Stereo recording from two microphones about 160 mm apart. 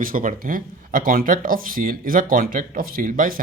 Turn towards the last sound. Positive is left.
turn(degrees=-60)  # may be behind; listen again after turning